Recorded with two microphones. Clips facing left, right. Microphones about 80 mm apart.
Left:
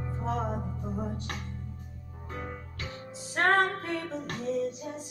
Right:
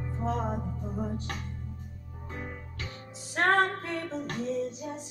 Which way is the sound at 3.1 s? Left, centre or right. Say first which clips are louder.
Even; left.